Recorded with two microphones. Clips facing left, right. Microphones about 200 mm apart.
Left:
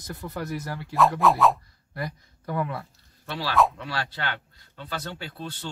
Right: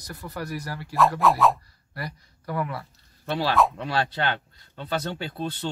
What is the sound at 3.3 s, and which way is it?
Speech, 20° right (ahead or behind).